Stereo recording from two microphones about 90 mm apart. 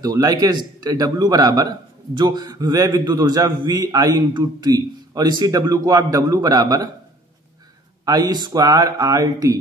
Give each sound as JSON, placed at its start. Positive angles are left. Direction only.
{"t": 0.0, "sound": "a man's voice", "side_deg": -40}
{"t": 4.3, "sound": "a man's voice", "side_deg": -50}
{"t": 8.0, "sound": "speech", "side_deg": -45}